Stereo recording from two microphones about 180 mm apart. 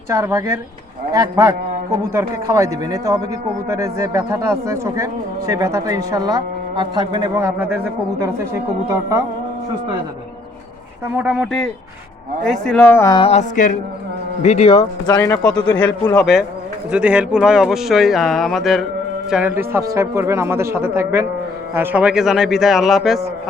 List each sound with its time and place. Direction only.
0.1 s speech: 15° right (ahead or behind)
8.9 s speech: 15° right (ahead or behind)
11.2 s speech: 5° right (ahead or behind); by 13.1 s 15° left (ahead or behind)
13.1 s speech: 30° left (ahead or behind)
14.4 s speech: 35° left (ahead or behind)
15.0 s speech: 20° left (ahead or behind)
15.7 s speech: 5° left (ahead or behind)